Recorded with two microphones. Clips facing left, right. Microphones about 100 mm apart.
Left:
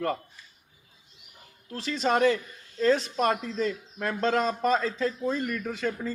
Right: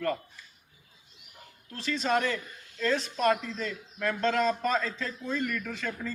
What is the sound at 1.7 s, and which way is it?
Speech, 40° left (ahead or behind).